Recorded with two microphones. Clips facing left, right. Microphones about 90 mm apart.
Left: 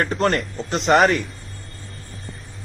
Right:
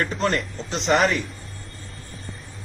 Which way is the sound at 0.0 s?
50° left (ahead or behind).